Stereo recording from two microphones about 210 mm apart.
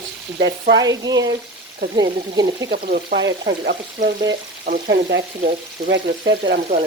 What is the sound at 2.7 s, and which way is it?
Frying, 45° right (ahead or behind).